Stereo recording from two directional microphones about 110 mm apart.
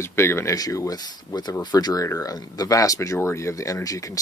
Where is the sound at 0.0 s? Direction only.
25° left (ahead or behind).